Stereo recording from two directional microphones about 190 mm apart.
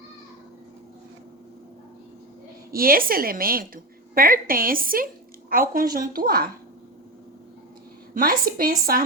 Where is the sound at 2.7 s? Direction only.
50° right (ahead or behind).